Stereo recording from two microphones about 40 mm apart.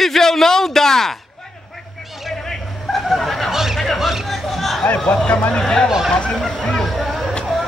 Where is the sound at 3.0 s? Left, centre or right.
Centre.